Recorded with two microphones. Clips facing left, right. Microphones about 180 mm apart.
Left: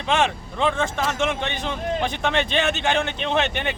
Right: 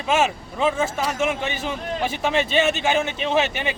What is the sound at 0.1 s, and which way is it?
Speech, 5° right (ahead or behind).